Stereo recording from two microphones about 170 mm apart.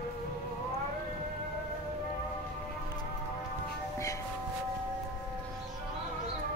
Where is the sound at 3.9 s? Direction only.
20° left (ahead or behind).